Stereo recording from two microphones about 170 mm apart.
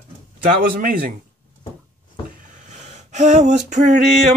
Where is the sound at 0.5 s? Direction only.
55° right (ahead or behind).